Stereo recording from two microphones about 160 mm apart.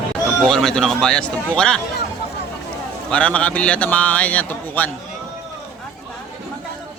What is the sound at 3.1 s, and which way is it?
A man's voice, 10° left (ahead or behind).